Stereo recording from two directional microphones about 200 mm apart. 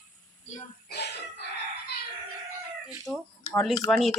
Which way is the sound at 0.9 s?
55° left (ahead or behind).